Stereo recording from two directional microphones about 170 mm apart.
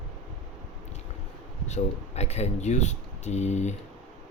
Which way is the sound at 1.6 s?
40° left (ahead or behind).